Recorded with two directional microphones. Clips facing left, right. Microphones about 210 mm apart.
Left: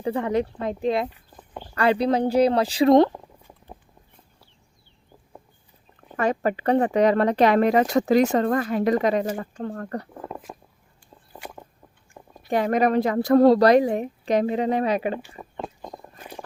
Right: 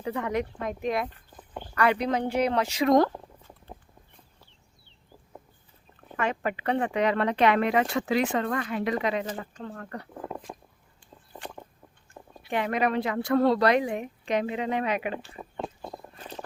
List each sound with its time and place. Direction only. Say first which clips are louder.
0.0 s speech: left 5 dB; 30° left (ahead or behind)
6.1 s speech: left 6 dB; 40° left (ahead or behind)
12.4 s speech: left 6 dB; 40° left (ahead or behind)